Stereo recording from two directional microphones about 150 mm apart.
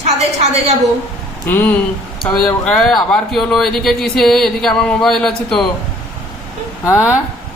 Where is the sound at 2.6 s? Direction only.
5° left (ahead or behind).